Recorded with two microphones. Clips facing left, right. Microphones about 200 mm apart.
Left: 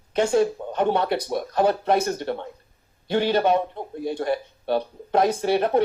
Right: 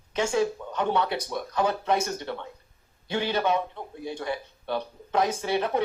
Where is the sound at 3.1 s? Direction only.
40° left (ahead or behind).